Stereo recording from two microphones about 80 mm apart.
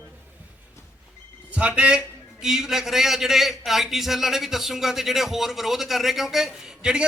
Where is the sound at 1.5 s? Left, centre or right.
Centre.